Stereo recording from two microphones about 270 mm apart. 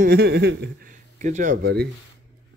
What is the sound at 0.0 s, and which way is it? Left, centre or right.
Speech, right.